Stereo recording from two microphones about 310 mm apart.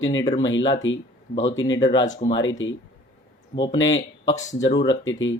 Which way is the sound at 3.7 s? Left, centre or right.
Left.